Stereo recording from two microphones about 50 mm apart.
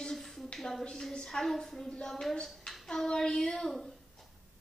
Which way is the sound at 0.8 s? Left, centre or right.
Centre.